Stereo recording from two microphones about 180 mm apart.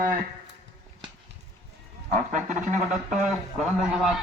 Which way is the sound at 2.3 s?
45° right (ahead or behind).